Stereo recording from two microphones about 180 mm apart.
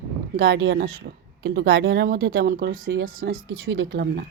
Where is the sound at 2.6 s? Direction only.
50° right (ahead or behind).